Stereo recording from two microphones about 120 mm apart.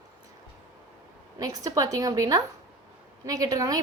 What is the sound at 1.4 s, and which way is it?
A woman's voice, 30° right (ahead or behind).